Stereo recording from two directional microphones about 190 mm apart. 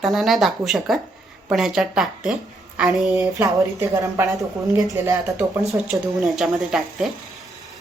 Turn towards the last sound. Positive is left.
turn(degrees=0)  # may be behind; listen again after turning